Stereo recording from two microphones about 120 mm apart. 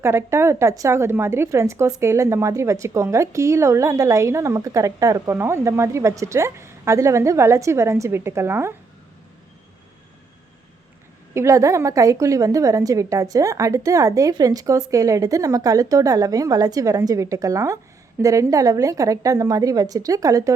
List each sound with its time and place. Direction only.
0.0 s a woman's voice: 20° right (ahead or behind)
11.3 s a woman's voice: 25° right (ahead or behind)